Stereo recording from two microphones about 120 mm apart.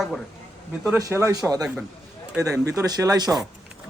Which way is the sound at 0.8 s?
20° right (ahead or behind).